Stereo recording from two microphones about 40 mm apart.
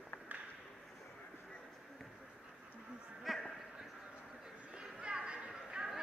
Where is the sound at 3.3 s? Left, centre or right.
Centre.